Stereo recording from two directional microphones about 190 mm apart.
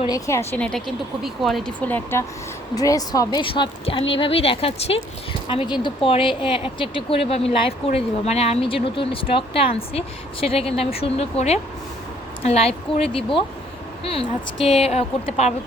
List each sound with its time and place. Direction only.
0.0 s speech: 15° left (ahead or behind); by 15.5 s 35° left (ahead or behind)